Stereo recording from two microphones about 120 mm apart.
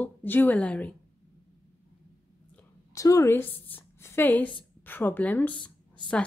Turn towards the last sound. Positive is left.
turn(degrees=10)  # may be behind; listen again after turning